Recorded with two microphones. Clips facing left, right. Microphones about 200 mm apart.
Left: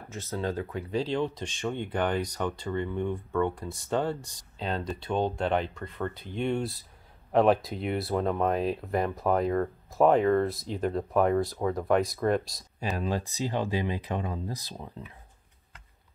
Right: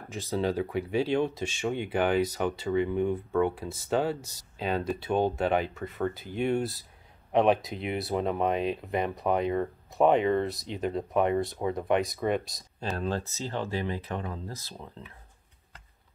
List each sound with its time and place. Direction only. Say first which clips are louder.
0.1 s speech: right 3 dB; 15° right (ahead or behind)
12.9 s speech: even; 10° left (ahead or behind)